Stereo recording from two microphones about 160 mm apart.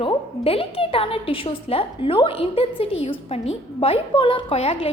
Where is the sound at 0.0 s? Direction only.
35° left (ahead or behind).